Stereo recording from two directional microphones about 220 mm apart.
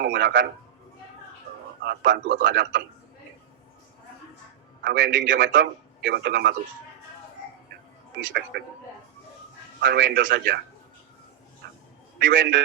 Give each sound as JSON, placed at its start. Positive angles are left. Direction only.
{"t": 0.0, "sound": "a man's voice", "side_deg": -45}
{"t": 1.8, "sound": "a man's voice", "side_deg": -50}
{"t": 4.8, "sound": "a man's voice", "side_deg": -55}
{"t": 6.1, "sound": "a man's voice", "side_deg": -50}
{"t": 8.3, "sound": "a man's voice", "side_deg": -45}
{"t": 9.8, "sound": "a man's voice", "side_deg": -50}
{"t": 12.2, "sound": "a man's voice", "side_deg": -55}